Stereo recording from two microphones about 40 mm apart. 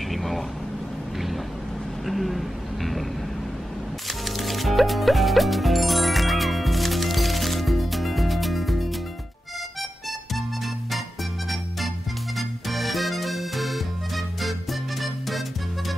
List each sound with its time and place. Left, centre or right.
0.1 s vehicle: centre
2.0 s a sound: centre
4.2 s music: centre
11.4 s music: centre